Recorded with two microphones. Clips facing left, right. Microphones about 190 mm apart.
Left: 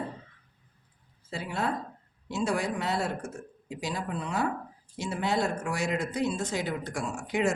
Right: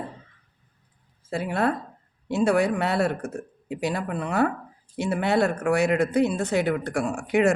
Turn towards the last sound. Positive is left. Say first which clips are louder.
# right 7 dB
turn(degrees=-65)  # may be behind; listen again after turning